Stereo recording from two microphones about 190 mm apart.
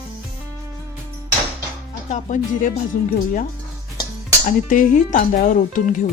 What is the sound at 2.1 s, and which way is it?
Music, 40° left (ahead or behind).